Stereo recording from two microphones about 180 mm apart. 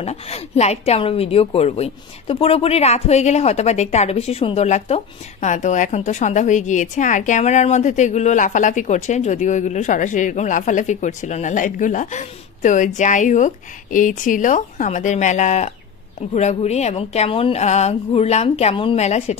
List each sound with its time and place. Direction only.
0.0 s a woman's voice: 35° left (ahead or behind)